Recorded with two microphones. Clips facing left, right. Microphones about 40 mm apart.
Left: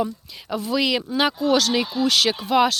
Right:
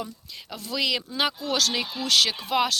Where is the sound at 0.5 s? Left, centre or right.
Centre.